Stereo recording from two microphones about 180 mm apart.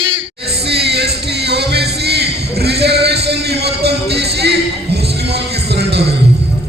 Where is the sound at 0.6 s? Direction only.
65° right (ahead or behind).